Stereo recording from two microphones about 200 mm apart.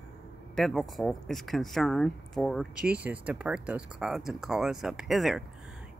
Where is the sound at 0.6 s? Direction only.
Centre (ahead or behind).